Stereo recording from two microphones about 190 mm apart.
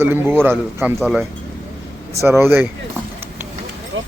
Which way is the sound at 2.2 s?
10° right (ahead or behind).